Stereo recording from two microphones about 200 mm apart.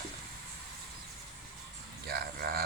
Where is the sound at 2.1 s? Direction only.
50° right (ahead or behind).